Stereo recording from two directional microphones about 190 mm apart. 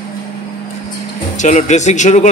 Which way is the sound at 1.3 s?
40° left (ahead or behind).